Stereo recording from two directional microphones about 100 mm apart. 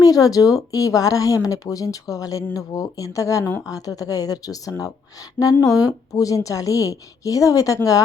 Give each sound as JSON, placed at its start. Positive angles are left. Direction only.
{"t": 0.0, "sound": "speech", "side_deg": 35}